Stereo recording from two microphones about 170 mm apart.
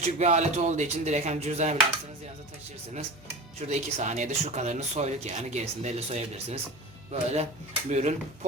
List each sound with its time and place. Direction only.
0.0 s speech: 40° right (ahead or behind)
3.7 s speech: 40° right (ahead or behind)